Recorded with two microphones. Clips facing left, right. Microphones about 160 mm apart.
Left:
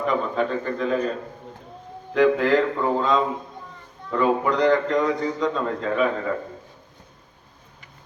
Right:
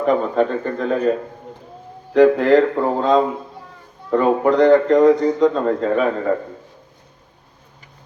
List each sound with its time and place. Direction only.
0.0 s a man's voice: 45° right (ahead or behind)
2.1 s a man's voice: 45° right (ahead or behind)